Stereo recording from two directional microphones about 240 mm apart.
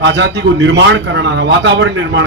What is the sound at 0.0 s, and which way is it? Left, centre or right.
Speech, right.